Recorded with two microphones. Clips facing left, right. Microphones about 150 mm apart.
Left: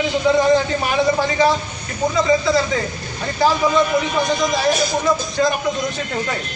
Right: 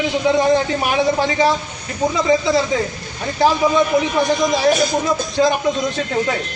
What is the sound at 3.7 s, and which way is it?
Speech, 20° right (ahead or behind).